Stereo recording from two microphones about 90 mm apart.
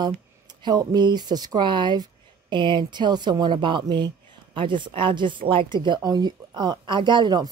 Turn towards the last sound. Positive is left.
turn(degrees=-55)  # may be behind; listen again after turning